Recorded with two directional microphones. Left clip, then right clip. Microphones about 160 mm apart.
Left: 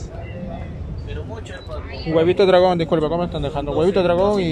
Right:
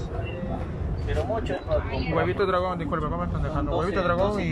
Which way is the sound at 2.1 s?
60° left (ahead or behind).